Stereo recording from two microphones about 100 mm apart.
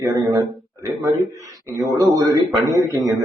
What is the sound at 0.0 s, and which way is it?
A man's voice, 35° right (ahead or behind).